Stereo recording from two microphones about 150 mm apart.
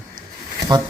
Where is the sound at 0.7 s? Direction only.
30° right (ahead or behind).